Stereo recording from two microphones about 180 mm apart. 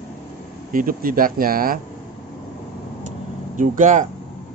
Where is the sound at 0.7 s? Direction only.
50° right (ahead or behind).